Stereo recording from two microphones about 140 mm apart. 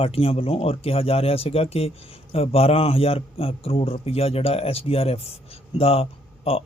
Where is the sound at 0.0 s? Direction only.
45° left (ahead or behind).